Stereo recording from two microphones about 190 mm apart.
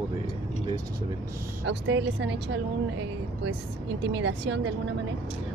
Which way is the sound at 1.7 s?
65° right (ahead or behind).